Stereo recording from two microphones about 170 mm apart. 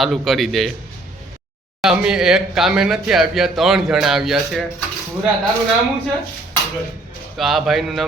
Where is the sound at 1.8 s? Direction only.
5° right (ahead or behind).